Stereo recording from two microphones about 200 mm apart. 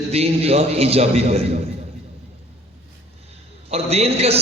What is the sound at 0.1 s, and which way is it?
A man's voice, 30° right (ahead or behind).